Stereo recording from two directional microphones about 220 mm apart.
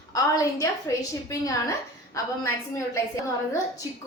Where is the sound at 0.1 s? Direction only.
15° left (ahead or behind).